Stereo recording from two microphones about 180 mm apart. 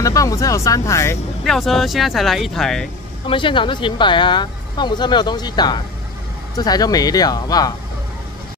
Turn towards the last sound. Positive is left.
turn(degrees=20)  # may be behind; listen again after turning